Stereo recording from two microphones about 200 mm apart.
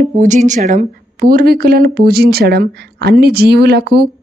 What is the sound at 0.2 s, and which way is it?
Speech, 40° right (ahead or behind).